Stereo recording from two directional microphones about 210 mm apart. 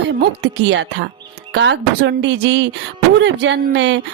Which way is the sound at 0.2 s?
55° right (ahead or behind).